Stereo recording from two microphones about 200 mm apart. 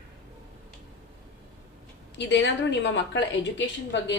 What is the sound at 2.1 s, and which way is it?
A woman's voice, 65° left (ahead or behind).